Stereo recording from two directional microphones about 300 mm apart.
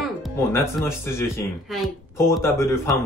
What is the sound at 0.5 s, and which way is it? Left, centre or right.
Speech, centre.